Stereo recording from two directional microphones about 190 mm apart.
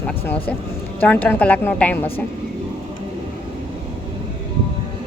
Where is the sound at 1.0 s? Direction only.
10° left (ahead or behind).